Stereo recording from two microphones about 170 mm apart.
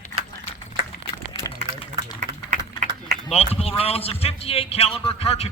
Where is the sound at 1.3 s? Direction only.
30° left (ahead or behind).